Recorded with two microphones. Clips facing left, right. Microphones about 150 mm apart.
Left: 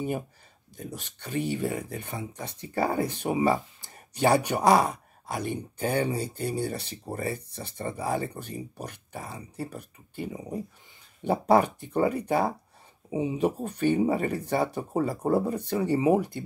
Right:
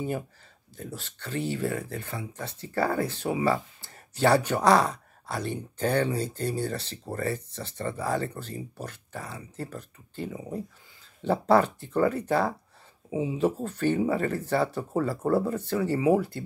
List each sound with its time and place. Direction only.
0.7 s speech: 15° left (ahead or behind)